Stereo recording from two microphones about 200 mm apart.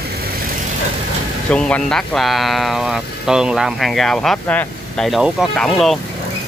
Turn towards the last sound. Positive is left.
turn(degrees=0)  # may be behind; listen again after turning